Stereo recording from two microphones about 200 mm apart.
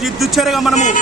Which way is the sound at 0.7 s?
35° left (ahead or behind).